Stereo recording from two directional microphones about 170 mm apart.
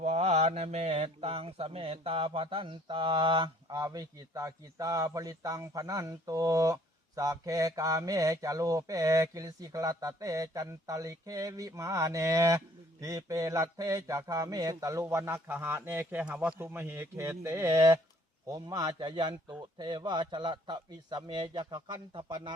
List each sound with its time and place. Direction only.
0.0 s speech: 40° right (ahead or behind)